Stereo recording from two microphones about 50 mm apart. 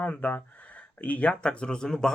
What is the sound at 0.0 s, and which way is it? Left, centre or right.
Speech, left.